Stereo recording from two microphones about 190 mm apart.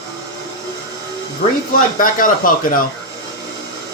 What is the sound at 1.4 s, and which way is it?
Speech, 55° left (ahead or behind).